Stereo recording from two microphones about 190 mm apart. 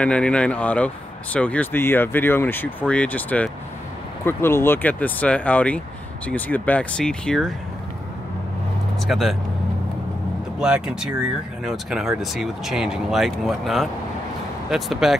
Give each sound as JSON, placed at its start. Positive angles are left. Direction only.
{"t": 0.0, "sound": "speech", "side_deg": 5}
{"t": 9.0, "sound": "speech", "side_deg": 0}
{"t": 10.6, "sound": "speech", "side_deg": -5}